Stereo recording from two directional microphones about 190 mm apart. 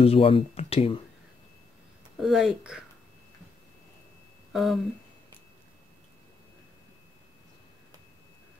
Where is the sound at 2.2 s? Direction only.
Centre (ahead or behind).